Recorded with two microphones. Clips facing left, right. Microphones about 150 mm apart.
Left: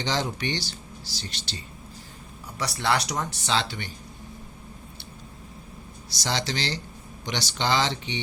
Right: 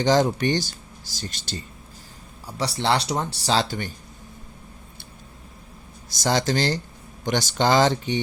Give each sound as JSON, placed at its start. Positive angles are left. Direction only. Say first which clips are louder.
{"t": 0.0, "sound": "speech", "louder": "right 9 dB", "side_deg": -45}
{"t": 2.5, "sound": "speech", "louder": "right 3 dB", "side_deg": -30}
{"t": 6.1, "sound": "speech", "louder": "right 7 dB", "side_deg": -45}